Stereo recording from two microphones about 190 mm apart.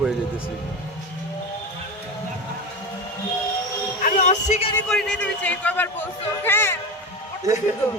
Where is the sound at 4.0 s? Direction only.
40° left (ahead or behind).